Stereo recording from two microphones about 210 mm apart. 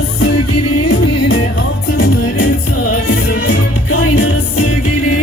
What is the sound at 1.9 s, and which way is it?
Music, 45° left (ahead or behind).